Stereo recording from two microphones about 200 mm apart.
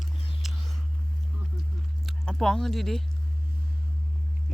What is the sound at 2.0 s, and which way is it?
Speech, centre (ahead or behind).